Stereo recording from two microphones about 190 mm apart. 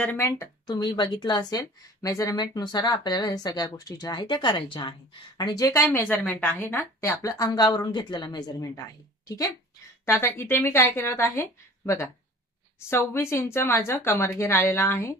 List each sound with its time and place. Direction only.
0.0 s a woman's voice: 10° left (ahead or behind)
10.0 s a woman's voice: 10° left (ahead or behind)